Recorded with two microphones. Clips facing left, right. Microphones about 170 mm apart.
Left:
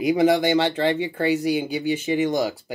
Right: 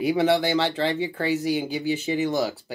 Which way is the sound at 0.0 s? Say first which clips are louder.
Left 3 dB; 15° left (ahead or behind).